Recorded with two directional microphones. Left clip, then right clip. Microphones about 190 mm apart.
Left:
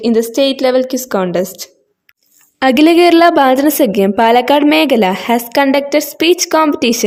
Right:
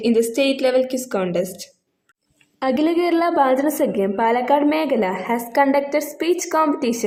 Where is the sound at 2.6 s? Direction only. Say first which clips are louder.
Left 11 dB; 55° left (ahead or behind).